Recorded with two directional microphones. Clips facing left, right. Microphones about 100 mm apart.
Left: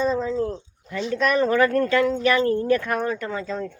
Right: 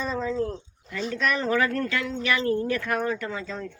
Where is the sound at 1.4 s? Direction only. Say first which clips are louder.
Left 8 dB; 35° left (ahead or behind).